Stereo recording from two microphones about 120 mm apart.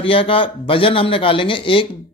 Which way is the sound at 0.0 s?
50° left (ahead or behind).